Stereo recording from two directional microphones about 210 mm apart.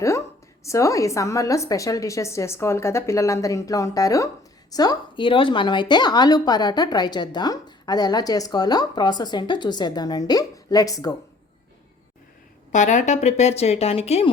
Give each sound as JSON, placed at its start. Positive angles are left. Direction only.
{"t": 0.6, "sound": "a woman's voice", "side_deg": 15}
{"t": 12.7, "sound": "a woman's voice", "side_deg": 35}